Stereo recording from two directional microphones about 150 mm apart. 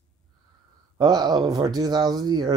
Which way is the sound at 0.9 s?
25° right (ahead or behind).